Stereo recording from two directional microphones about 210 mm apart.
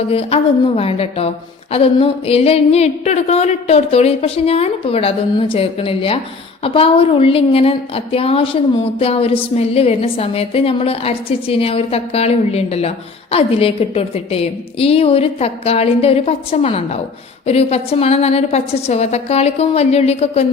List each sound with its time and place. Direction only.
0.1 s a woman's voice: 30° left (ahead or behind)